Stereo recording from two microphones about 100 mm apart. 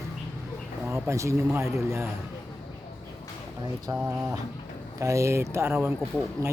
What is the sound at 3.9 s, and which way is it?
Speech, 30° right (ahead or behind).